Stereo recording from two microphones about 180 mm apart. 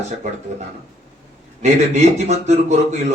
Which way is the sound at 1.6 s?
40° right (ahead or behind).